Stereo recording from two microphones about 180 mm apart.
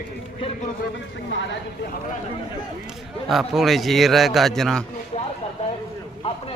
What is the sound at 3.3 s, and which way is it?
A man's voice, centre (ahead or behind).